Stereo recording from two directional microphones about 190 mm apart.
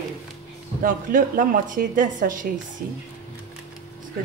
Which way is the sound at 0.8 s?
45° right (ahead or behind).